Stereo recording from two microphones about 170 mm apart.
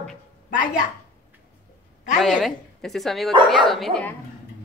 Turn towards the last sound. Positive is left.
turn(degrees=0)  # may be behind; listen again after turning